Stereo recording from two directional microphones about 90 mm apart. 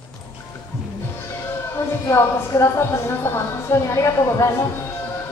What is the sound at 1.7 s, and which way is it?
A woman's voice, 30° left (ahead or behind).